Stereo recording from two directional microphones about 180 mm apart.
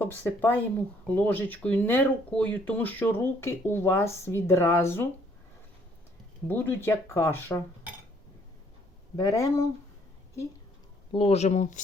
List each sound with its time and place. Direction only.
0.0 s speech: 10° left (ahead or behind)
6.5 s speech: 10° left (ahead or behind)
9.1 s speech: 20° left (ahead or behind)
11.1 s speech: 35° left (ahead or behind)